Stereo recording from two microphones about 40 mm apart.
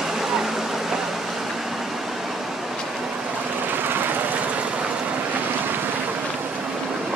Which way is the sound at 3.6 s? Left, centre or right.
Right.